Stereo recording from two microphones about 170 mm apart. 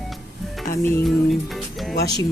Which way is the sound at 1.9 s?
70° left (ahead or behind).